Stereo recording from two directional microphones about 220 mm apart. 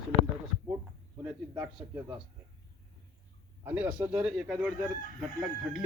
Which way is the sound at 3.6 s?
10° right (ahead or behind).